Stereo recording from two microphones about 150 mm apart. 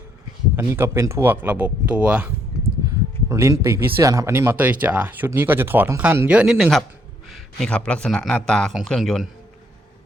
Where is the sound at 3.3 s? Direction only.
20° right (ahead or behind); by 9.3 s centre (ahead or behind).